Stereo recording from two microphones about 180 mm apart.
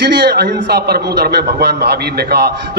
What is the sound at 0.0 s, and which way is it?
A man's voice, 60° right (ahead or behind).